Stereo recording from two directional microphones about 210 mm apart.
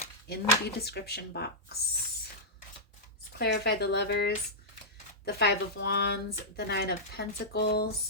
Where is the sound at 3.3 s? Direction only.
50° left (ahead or behind).